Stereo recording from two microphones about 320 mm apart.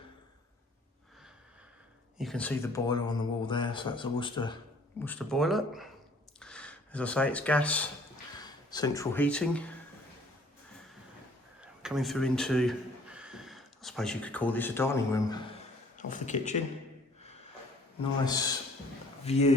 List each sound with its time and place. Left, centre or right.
2.1 s speech: centre
5.0 s speech: centre
11.6 s a man's voice: centre
16.0 s speech: left
18.3 s speech: centre